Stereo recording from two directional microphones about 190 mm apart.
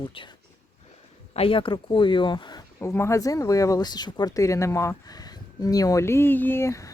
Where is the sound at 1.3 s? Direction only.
30° left (ahead or behind).